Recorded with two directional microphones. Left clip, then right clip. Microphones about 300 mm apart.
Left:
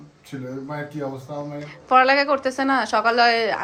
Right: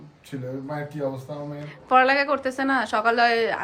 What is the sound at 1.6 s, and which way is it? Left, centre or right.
A woman's voice, centre.